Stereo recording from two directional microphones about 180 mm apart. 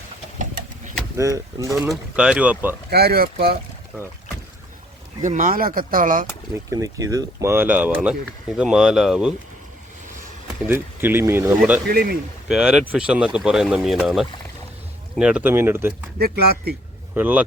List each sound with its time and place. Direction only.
1.1 s speech: 15° right (ahead or behind)
1.9 s speech: 5° right (ahead or behind)
2.9 s speech: 60° right (ahead or behind)
5.2 s speech: 45° right (ahead or behind)
6.7 s speech: 20° right (ahead or behind)
10.7 s speech: 10° right (ahead or behind)
11.9 s speech: 55° right (ahead or behind)
12.5 s speech: 5° right (ahead or behind)
16.1 s speech: 60° right (ahead or behind)
17.2 s speech: 10° right (ahead or behind)